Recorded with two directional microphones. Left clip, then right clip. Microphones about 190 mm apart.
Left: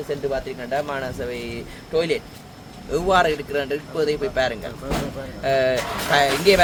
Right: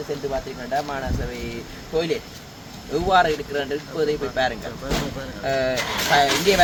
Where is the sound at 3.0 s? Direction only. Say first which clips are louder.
Even; 30° left (ahead or behind).